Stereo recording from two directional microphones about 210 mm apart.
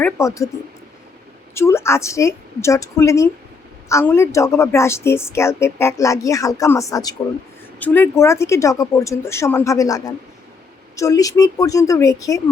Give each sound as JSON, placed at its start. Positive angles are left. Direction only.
{"t": 0.0, "sound": "a woman's voice", "side_deg": 15}
{"t": 1.5, "sound": "a woman's voice", "side_deg": 10}